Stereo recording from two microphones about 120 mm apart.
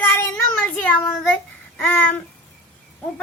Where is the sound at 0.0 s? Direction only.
20° left (ahead or behind).